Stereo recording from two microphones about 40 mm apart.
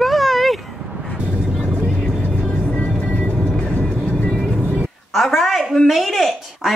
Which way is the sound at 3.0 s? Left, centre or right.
Left.